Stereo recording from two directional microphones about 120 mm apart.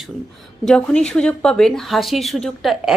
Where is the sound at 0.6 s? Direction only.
5° left (ahead or behind).